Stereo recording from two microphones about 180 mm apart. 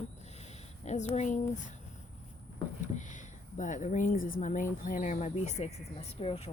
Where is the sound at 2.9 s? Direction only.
45° left (ahead or behind).